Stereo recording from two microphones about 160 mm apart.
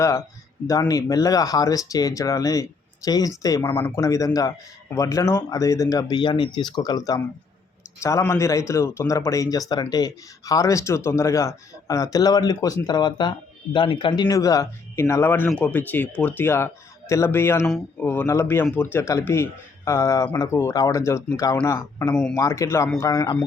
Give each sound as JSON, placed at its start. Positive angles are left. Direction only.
{"t": 0.0, "sound": "speech", "side_deg": 20}
{"t": 22.1, "sound": "speech", "side_deg": 5}
{"t": 22.4, "sound": "speech", "side_deg": 20}